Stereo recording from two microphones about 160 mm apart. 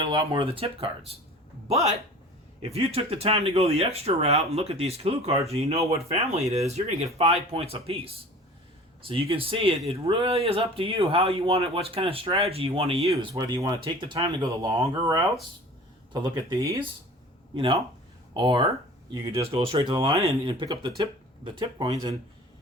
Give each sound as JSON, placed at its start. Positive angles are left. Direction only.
{"t": 0.0, "sound": "a man's voice", "side_deg": -25}
{"t": 9.3, "sound": "speech", "side_deg": -35}
{"t": 13.3, "sound": "speech", "side_deg": -20}
{"t": 17.5, "sound": "speech", "side_deg": -35}